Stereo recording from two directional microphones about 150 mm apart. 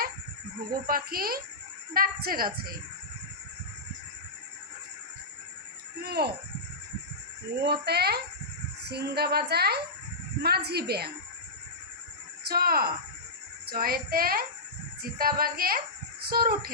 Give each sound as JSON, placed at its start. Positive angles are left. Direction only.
{"t": 0.7, "sound": "a woman's voice", "side_deg": -75}
{"t": 6.0, "sound": "a woman's voice", "side_deg": -90}
{"t": 7.6, "sound": "a woman's voice", "side_deg": -90}
{"t": 12.5, "sound": "a woman's voice", "side_deg": -90}
{"t": 13.7, "sound": "a woman's voice", "side_deg": -80}